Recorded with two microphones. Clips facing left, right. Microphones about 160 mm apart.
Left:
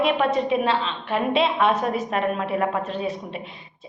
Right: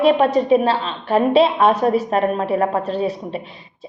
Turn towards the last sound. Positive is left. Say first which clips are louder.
# right 5 dB
turn(degrees=-35)  # may be behind; listen again after turning